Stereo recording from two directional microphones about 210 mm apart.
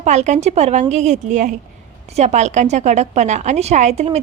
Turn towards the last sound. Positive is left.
turn(degrees=-30)  # may be behind; listen again after turning